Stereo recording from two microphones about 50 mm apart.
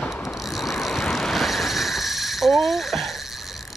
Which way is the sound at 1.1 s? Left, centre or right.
Centre.